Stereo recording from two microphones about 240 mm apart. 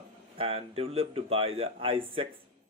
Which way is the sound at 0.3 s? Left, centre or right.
Right.